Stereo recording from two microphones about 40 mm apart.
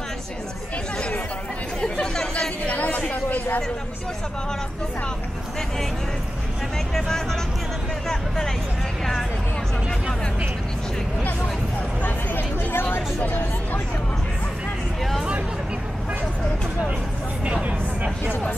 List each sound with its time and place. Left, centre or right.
1.8 s chatter: left
2.6 s chatter: left
7.1 s speech: centre
12.0 s speech: left